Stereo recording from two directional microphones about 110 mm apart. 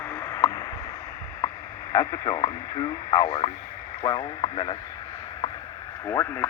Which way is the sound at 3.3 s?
55° left (ahead or behind).